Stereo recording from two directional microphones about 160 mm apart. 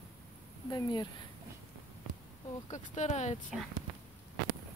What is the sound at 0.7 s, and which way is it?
Speech, 25° left (ahead or behind).